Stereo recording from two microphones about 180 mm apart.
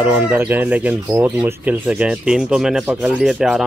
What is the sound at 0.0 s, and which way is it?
Speech, 10° right (ahead or behind).